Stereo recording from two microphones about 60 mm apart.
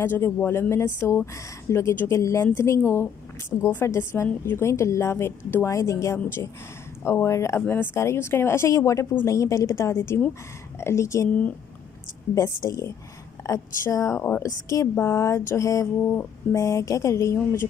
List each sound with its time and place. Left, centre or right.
0.0 s a woman's voice: left
7.6 s speech: left
7.9 s a woman's voice: left
12.4 s speech: left
14.1 s speech: left
14.4 s a woman's voice: left
15.0 s speech: left
16.0 s speech: left